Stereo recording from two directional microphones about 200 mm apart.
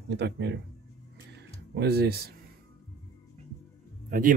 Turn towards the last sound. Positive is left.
turn(degrees=-45)  # may be behind; listen again after turning